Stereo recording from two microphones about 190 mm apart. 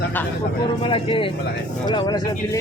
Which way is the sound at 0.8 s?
30° left (ahead or behind).